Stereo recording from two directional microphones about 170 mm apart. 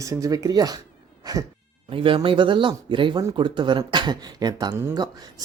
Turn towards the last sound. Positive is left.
turn(degrees=-25)  # may be behind; listen again after turning